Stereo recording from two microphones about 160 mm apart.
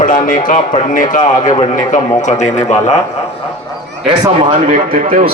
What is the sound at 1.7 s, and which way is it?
A man's voice, 50° left (ahead or behind).